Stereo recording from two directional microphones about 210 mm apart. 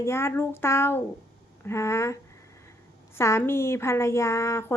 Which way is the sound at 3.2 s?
15° left (ahead or behind).